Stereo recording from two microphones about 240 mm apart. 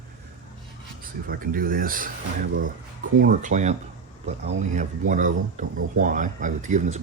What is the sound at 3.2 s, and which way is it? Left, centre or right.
Speech, right.